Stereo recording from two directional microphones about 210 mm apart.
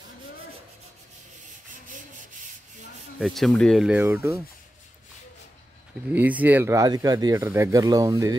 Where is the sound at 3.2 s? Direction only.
Centre (ahead or behind).